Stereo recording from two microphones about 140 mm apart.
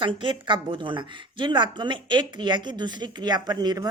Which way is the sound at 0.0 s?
35° right (ahead or behind).